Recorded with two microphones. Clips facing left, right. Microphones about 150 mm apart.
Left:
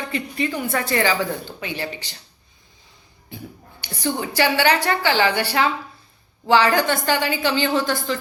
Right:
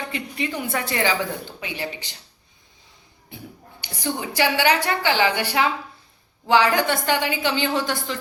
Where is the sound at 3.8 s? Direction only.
15° right (ahead or behind).